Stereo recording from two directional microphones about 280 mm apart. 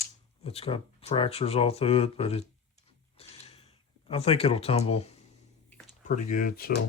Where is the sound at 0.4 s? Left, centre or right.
Centre.